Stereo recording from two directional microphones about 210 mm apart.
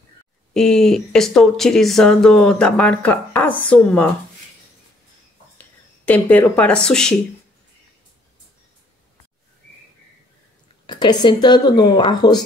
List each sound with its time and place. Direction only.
0.5 s speech: centre (ahead or behind)
5.6 s speech: 5° left (ahead or behind)
10.9 s speech: 20° left (ahead or behind)